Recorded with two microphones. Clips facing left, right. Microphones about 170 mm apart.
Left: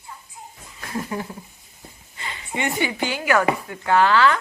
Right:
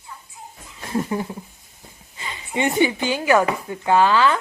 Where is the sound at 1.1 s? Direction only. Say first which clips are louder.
Right 2 dB; 25° right (ahead or behind).